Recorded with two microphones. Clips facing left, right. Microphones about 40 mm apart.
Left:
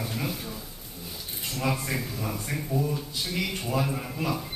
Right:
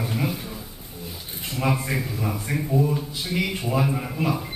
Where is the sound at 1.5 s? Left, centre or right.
Centre.